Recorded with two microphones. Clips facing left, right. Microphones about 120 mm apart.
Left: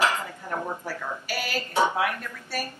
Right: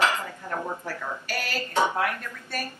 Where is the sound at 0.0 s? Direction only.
15° left (ahead or behind).